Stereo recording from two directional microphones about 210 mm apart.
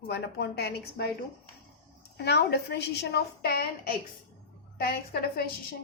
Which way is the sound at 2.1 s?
55° left (ahead or behind).